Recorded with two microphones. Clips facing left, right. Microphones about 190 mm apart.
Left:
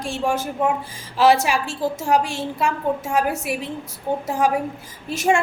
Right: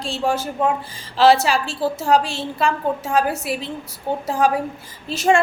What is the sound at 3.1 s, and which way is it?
Speech, 15° left (ahead or behind).